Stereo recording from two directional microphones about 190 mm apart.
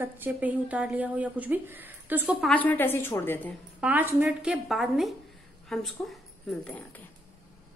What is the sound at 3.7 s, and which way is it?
A woman's voice, 10° right (ahead or behind).